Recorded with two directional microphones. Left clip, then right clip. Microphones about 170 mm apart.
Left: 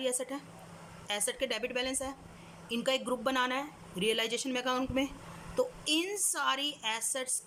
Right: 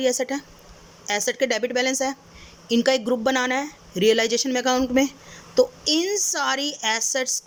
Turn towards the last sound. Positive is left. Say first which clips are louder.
# right 12 dB
turn(degrees=-35)  # may be behind; listen again after turning